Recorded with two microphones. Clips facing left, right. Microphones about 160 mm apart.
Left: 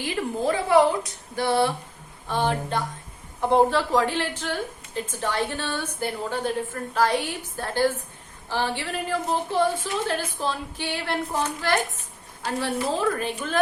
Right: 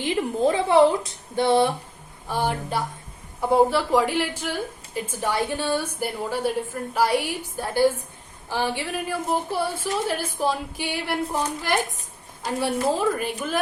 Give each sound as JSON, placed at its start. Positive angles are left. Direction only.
{"t": 0.0, "sound": "a woman's voice", "side_deg": -20}
{"t": 2.2, "sound": "a woman's voice", "side_deg": -10}